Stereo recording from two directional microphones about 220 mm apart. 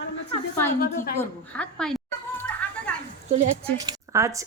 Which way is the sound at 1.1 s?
5° left (ahead or behind).